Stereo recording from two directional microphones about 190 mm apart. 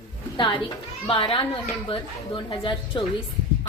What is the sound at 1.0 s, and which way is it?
A woman's voice, 30° left (ahead or behind).